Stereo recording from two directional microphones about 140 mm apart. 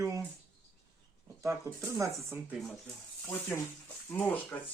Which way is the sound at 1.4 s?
20° right (ahead or behind).